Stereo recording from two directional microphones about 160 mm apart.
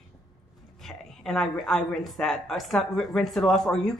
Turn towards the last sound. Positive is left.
turn(degrees=5)  # may be behind; listen again after turning